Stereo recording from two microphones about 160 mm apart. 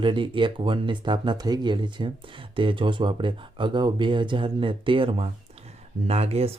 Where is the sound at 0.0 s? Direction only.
30° right (ahead or behind).